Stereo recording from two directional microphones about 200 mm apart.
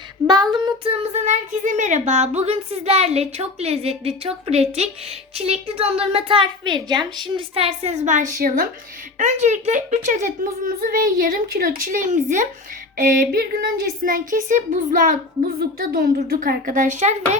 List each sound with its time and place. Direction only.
0.3 s a woman's voice: 20° right (ahead or behind)
1.1 s a woman's voice: 35° right (ahead or behind)
9.1 s speech: 35° right (ahead or behind)